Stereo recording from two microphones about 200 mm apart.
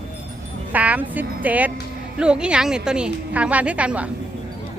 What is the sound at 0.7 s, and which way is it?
Speech, 10° right (ahead or behind).